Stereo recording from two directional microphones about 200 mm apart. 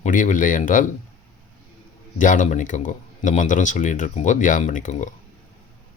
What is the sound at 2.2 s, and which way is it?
Speech, 40° left (ahead or behind).